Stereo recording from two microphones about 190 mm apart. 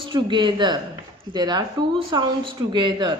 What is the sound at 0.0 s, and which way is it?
Speech, 25° right (ahead or behind).